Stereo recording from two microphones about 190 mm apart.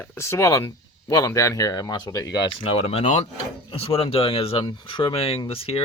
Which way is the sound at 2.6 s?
30° left (ahead or behind).